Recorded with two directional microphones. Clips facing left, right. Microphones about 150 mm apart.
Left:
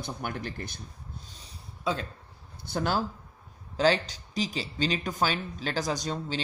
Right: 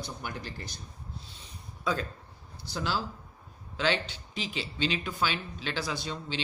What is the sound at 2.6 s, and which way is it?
Speech, 50° left (ahead or behind).